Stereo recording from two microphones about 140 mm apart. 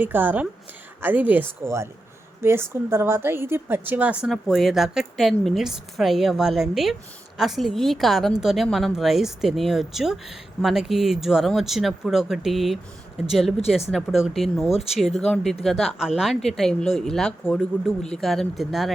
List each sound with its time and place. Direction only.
0.0 s a woman's voice: 15° right (ahead or behind)
13.9 s speech: centre (ahead or behind)